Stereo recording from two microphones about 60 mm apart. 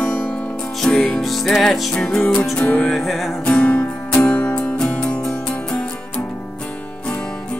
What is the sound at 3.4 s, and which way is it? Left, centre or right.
Music, left.